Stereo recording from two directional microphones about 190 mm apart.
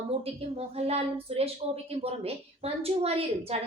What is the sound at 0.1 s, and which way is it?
A woman's voice, 30° right (ahead or behind).